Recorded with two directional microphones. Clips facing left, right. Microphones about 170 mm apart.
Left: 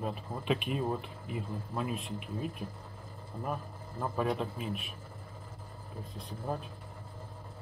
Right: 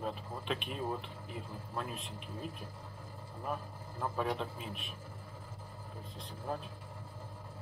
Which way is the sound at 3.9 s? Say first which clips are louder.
Left 3 dB; 5° left (ahead or behind).